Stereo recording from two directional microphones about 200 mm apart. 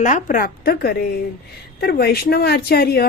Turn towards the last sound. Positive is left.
turn(degrees=50)  # may be behind; listen again after turning